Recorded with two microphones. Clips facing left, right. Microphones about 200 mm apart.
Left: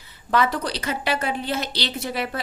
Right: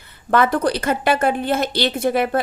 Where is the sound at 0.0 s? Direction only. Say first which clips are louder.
Right 4 dB; 55° right (ahead or behind).